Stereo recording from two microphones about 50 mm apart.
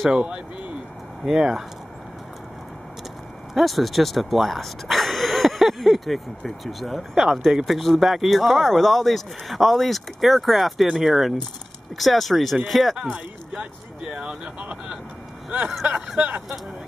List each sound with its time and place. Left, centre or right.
1.2 s speech: centre
3.5 s speech: centre
14.0 s speech: centre
15.7 s speech: centre
16.2 s speech: right